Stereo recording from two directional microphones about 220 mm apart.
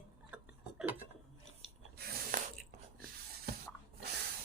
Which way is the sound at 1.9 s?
45° right (ahead or behind).